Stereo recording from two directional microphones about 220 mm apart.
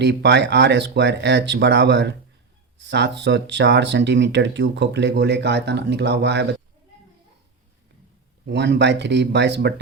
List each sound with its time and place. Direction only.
0.0 s speech: 50° right (ahead or behind)
8.4 s speech: 50° right (ahead or behind)